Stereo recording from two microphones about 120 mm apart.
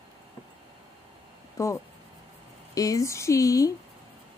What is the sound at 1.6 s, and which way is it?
Speech, 25° left (ahead or behind).